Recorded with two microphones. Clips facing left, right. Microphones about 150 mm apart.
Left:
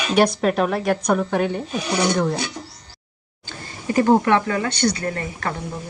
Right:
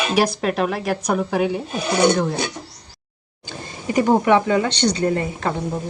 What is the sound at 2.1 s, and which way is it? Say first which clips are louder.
Speech: even; centre (ahead or behind).